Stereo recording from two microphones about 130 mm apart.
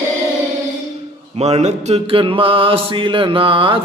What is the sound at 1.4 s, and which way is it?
Mantra, 60° right (ahead or behind).